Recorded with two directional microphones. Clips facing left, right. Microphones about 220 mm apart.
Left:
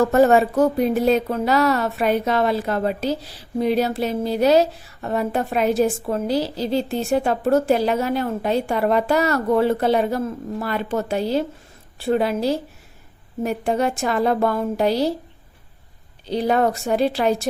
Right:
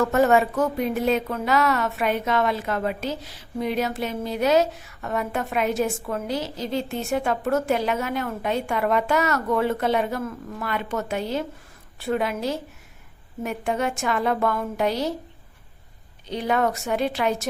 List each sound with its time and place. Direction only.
0.0 s speech: 35° left (ahead or behind)
16.2 s speech: 35° left (ahead or behind)